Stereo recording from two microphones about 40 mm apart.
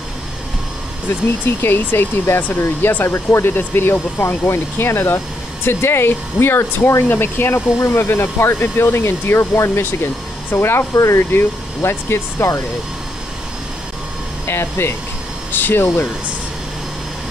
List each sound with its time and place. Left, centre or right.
1.6 s speech: left
2.4 s speech: left
14.4 s speech: left
15.5 s speech: left